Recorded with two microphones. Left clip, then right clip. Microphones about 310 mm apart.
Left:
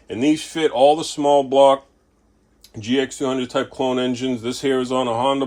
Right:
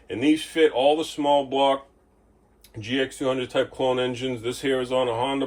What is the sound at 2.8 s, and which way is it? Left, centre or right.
Speech, left.